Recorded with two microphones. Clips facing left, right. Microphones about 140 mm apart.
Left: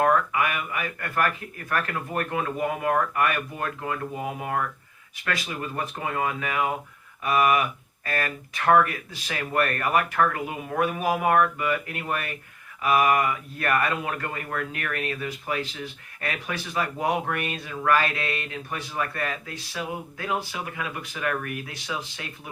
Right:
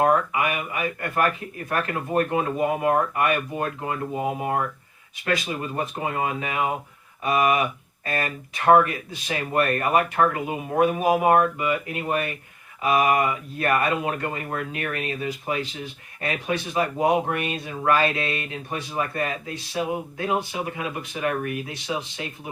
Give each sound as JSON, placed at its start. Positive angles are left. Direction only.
{"t": 0.0, "sound": "speech", "side_deg": -20}